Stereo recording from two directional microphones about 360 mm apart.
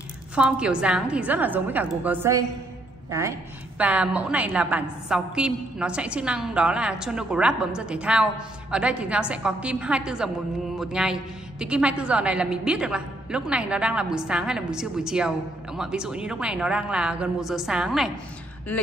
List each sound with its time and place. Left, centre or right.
0.4 s a woman's voice: centre